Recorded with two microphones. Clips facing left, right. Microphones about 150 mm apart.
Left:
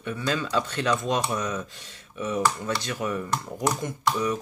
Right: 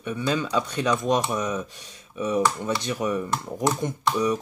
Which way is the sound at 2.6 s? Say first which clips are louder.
Right 3 dB; 20° right (ahead or behind).